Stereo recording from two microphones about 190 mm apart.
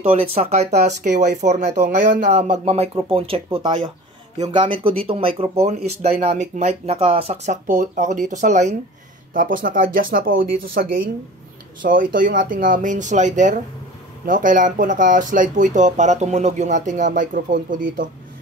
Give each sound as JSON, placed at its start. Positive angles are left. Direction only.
{"t": 0.1, "sound": "speech", "side_deg": -30}
{"t": 7.6, "sound": "speech", "side_deg": -45}